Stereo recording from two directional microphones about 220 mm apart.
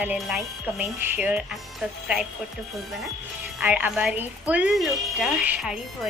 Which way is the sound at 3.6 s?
5° right (ahead or behind).